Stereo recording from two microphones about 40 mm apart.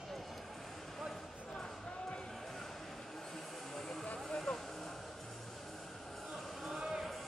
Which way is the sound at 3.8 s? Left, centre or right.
Centre.